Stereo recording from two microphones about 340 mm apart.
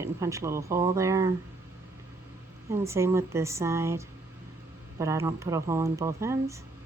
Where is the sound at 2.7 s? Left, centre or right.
Centre.